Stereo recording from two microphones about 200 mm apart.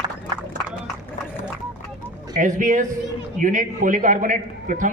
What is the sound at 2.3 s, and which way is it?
A man's voice, 40° right (ahead or behind).